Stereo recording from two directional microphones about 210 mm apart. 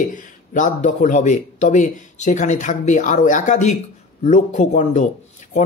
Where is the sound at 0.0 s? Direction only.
40° left (ahead or behind).